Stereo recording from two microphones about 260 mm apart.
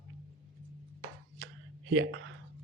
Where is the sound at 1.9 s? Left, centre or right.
Right.